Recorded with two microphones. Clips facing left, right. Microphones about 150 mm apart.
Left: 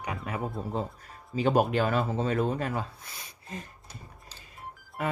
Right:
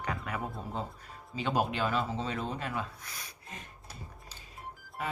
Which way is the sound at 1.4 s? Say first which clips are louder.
Left 6 dB; 45° left (ahead or behind).